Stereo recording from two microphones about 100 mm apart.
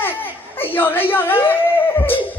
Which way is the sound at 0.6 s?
20° left (ahead or behind).